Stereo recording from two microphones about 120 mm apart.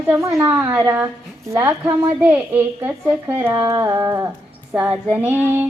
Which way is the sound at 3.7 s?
25° right (ahead or behind).